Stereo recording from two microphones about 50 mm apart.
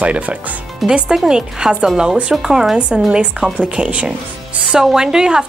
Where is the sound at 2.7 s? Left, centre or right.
Right.